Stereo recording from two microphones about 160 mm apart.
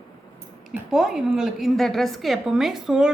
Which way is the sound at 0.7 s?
Centre (ahead or behind).